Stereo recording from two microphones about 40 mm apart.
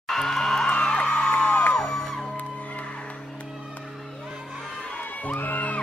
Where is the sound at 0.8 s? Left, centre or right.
Left.